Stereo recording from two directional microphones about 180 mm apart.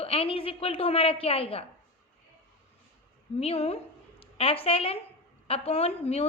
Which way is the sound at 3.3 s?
35° left (ahead or behind).